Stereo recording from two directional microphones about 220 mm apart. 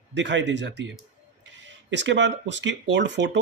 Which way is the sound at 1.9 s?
55° right (ahead or behind).